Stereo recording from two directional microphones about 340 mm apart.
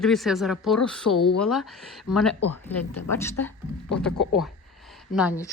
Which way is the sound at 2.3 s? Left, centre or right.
Left.